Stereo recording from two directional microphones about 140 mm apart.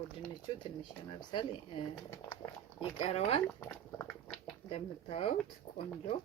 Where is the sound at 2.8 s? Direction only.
45° left (ahead or behind).